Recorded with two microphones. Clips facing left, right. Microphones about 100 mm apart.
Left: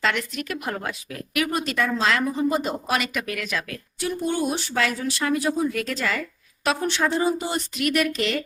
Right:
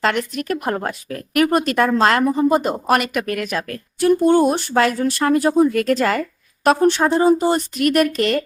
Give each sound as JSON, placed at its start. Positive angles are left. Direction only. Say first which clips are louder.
{"t": 0.0, "sound": "a woman's voice", "louder": "right 5 dB", "side_deg": -45}